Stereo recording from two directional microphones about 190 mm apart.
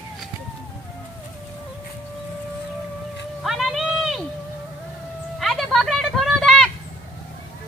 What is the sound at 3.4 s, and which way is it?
Run, centre (ahead or behind).